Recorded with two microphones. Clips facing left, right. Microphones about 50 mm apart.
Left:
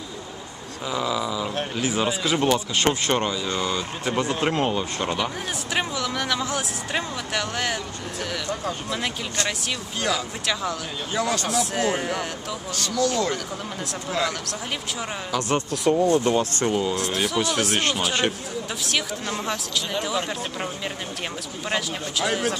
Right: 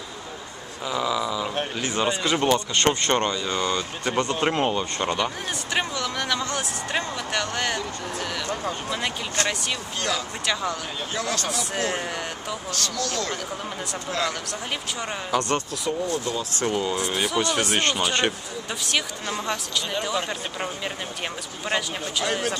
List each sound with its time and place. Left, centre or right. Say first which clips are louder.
0.9 s speech: even; centre
1.8 s speech: left 1 dB; centre
11.1 s speech: left 5 dB; centre
12.8 s speech: left 7 dB; centre
15.7 s speech: left 7 dB; left
16.6 s speech: left 1 dB; centre